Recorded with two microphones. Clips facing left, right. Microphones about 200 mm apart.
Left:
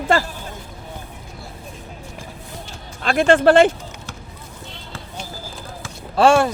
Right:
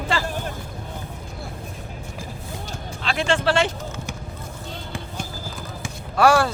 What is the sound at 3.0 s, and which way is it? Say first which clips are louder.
Speech: left 8 dB; 50° left (ahead or behind).